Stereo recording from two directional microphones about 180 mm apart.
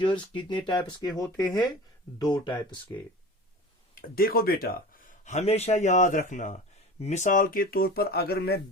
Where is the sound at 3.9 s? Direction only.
55° left (ahead or behind).